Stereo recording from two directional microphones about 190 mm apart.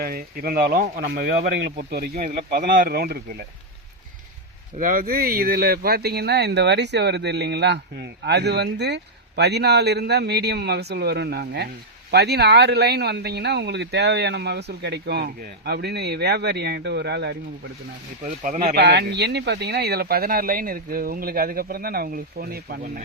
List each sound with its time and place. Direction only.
0.0 s speech: 50° right (ahead or behind)
2.1 s speech: 40° right (ahead or behind)
4.8 s speech: 45° right (ahead or behind)
18.4 s speech: 40° right (ahead or behind)
18.7 s speech: 60° right (ahead or behind)